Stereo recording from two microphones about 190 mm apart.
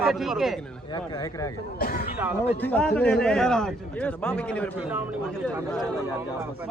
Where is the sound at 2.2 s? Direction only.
10° right (ahead or behind).